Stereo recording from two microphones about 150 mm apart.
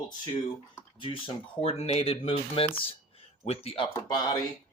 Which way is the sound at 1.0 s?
35° left (ahead or behind).